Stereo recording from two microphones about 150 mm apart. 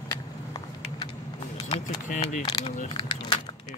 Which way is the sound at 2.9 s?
30° left (ahead or behind).